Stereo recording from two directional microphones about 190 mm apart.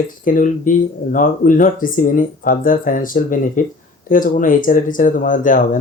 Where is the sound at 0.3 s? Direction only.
45° left (ahead or behind).